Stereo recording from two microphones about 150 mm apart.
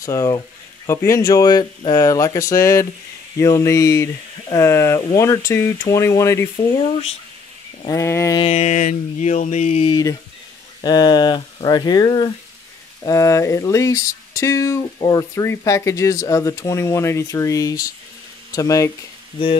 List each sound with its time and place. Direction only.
0.0 s speech: 20° left (ahead or behind)
7.8 s speech: 20° left (ahead or behind)
8.4 s mantra: 45° left (ahead or behind)
8.7 s a sound: 60° left (ahead or behind)
9.8 s speech: 25° left (ahead or behind)